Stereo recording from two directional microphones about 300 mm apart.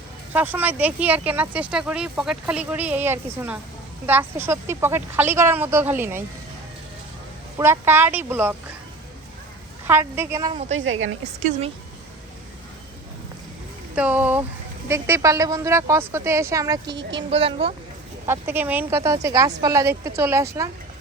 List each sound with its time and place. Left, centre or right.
0.3 s a woman's voice: centre
7.6 s a woman's voice: centre
9.8 s a woman's voice: centre
10.8 s speech: right
13.9 s a woman's voice: centre
18.3 s a woman's voice: centre